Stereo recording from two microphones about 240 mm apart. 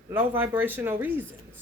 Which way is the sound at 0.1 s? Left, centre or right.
Centre.